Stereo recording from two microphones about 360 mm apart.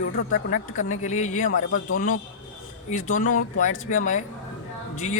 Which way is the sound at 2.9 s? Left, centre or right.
Left.